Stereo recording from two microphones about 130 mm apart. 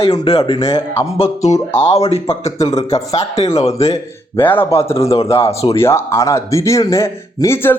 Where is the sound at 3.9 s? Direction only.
15° left (ahead or behind).